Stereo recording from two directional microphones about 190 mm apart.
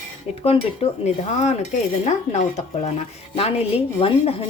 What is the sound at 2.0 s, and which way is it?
A woman's voice, 35° left (ahead or behind).